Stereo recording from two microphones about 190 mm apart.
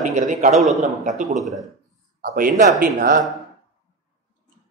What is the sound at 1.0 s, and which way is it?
A man's voice, 40° right (ahead or behind).